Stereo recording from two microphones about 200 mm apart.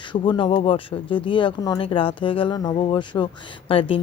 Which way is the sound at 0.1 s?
25° left (ahead or behind).